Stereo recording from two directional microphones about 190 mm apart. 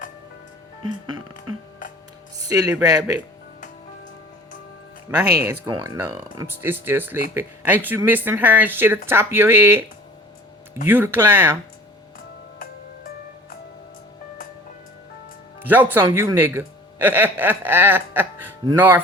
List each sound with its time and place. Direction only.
2.5 s speech: 20° right (ahead or behind)
5.4 s speech: 15° right (ahead or behind)
10.8 s speech: 10° right (ahead or behind)
15.6 s speech: 10° right (ahead or behind)